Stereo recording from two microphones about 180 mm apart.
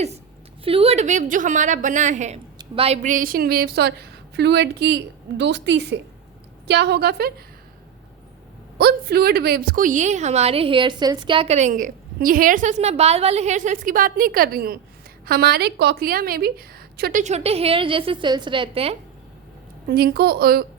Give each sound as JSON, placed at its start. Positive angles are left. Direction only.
{"t": 0.6, "sound": "a woman's voice", "side_deg": -30}
{"t": 8.8, "sound": "a woman's voice", "side_deg": -60}
{"t": 19.9, "sound": "a woman's voice", "side_deg": -60}